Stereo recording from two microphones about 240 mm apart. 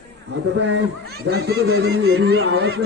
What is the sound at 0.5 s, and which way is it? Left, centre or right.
A man's voice, right.